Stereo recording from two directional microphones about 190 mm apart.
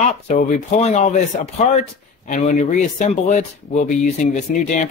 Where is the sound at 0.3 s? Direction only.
40° left (ahead or behind).